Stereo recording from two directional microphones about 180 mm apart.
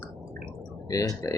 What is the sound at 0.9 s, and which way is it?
Speech, 20° left (ahead or behind).